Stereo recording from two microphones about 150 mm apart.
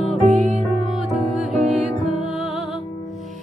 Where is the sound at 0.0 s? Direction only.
Centre (ahead or behind).